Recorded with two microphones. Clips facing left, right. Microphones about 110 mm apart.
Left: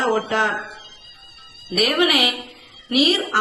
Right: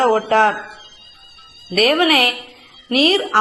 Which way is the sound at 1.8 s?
45° right (ahead or behind).